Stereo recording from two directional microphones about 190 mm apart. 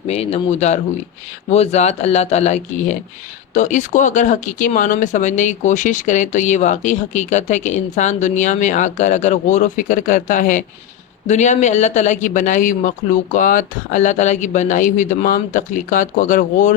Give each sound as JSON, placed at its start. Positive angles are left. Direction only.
{"t": 0.1, "sound": "speech", "side_deg": 30}